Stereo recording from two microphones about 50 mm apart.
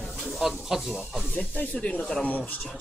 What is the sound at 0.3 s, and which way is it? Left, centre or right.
Speech, centre.